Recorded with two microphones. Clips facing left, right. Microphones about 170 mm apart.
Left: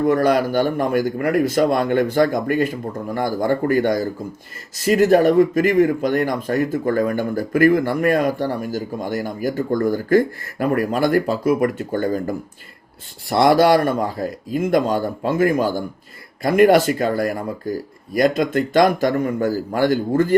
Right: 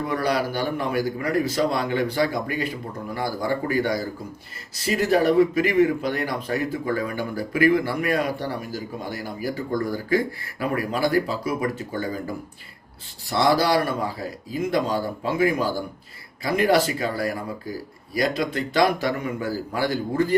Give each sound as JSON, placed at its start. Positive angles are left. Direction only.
{"t": 0.0, "sound": "speech", "side_deg": 50}
{"t": 13.3, "sound": "speech", "side_deg": 55}